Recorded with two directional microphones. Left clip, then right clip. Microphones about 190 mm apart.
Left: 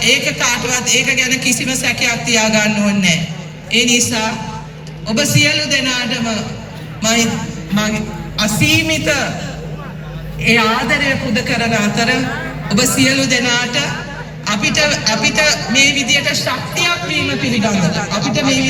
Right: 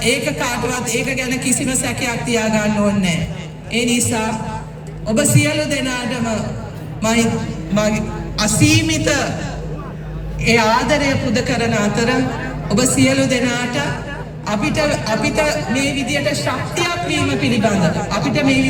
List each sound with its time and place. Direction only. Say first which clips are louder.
0.0 s a man's voice: left 4 dB; 70° right (ahead or behind)
10.4 s a man's voice: left 1 dB; 55° right (ahead or behind)
18.1 s speech: left 1 dB; 45° left (ahead or behind)